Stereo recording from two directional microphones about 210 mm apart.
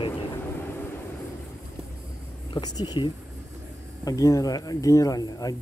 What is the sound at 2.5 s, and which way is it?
Speech, 20° left (ahead or behind).